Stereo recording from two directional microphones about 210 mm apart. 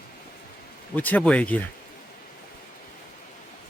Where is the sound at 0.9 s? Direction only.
10° left (ahead or behind).